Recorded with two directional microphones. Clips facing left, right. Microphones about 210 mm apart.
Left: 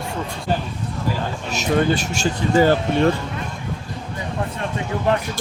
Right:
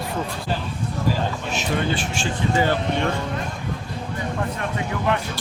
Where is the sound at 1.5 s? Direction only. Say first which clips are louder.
Left 7 dB; 40° left (ahead or behind).